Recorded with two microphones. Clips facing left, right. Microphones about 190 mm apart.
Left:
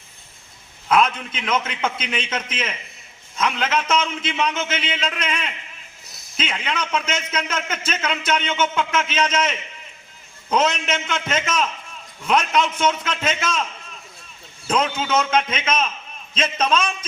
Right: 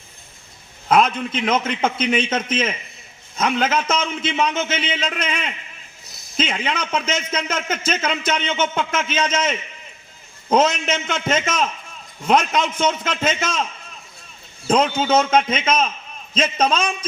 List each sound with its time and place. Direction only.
0.9 s a man's voice: 40° right (ahead or behind)
14.7 s a man's voice: 40° right (ahead or behind)